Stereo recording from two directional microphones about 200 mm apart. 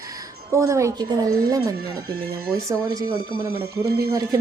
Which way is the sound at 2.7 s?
20° right (ahead or behind).